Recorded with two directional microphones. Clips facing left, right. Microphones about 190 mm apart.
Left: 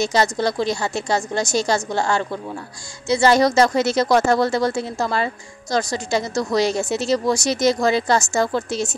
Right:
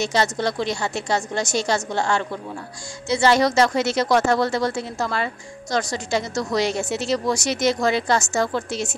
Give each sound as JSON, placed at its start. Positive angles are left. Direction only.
{"t": 0.0, "sound": "a woman's voice", "side_deg": 40}